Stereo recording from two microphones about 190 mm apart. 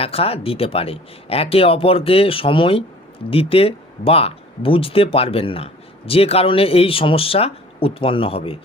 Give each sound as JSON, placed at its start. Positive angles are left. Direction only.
{"t": 0.0, "sound": "speech", "side_deg": 30}